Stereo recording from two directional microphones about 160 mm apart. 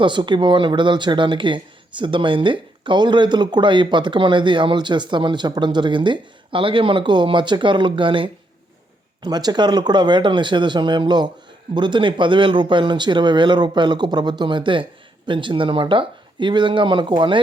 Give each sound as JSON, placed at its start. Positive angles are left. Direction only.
{"t": 0.0, "sound": "speech", "side_deg": -30}